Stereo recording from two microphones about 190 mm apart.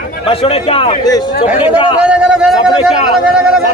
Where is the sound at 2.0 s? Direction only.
5° right (ahead or behind).